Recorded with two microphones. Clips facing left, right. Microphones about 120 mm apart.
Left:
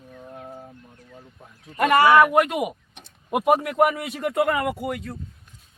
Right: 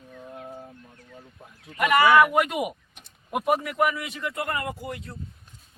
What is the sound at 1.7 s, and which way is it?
Speech, 30° left (ahead or behind).